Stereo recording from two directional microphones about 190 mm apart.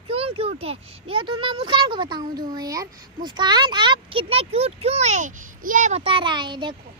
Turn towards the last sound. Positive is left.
turn(degrees=-25)  # may be behind; listen again after turning